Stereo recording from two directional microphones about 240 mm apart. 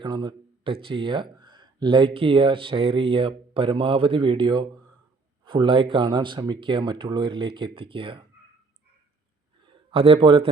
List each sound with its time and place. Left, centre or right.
0.0 s speech: centre
9.6 s speech: right